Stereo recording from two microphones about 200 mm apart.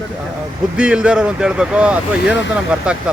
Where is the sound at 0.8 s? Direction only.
5° right (ahead or behind).